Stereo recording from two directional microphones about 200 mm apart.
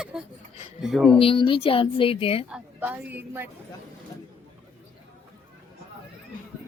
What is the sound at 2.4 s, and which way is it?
A woman's voice, 5° right (ahead or behind).